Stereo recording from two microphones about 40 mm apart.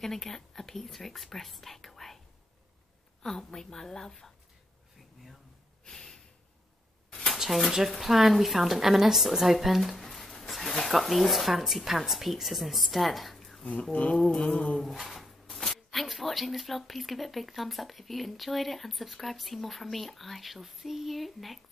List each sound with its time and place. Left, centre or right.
0.0 s speech: centre
3.2 s a woman's voice: centre
5.9 s snort: centre
7.1 s a sound: centre
7.3 s a sound: centre
8.0 s speech: centre
13.9 s a sound: left
14.3 s mantra: centre
14.8 s speech: centre